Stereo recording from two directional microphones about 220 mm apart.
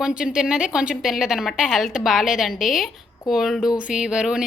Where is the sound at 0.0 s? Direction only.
5° right (ahead or behind).